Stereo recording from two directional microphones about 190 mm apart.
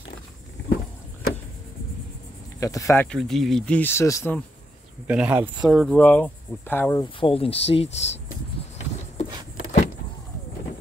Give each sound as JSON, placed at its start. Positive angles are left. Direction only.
{"t": 0.6, "sound": "walk", "side_deg": 65}
{"t": 2.6, "sound": "speech", "side_deg": 15}
{"t": 3.1, "sound": "speech", "side_deg": 0}
{"t": 5.0, "sound": "speech", "side_deg": -5}
{"t": 7.2, "sound": "speech", "side_deg": 30}